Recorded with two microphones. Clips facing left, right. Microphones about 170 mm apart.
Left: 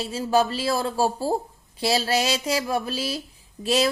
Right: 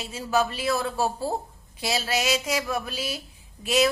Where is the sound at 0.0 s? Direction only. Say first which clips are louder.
Left 4 dB; 30° left (ahead or behind).